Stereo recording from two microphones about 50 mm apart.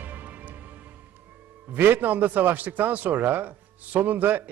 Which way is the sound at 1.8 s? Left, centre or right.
Right.